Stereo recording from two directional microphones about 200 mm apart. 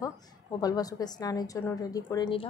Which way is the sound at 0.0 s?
20° left (ahead or behind).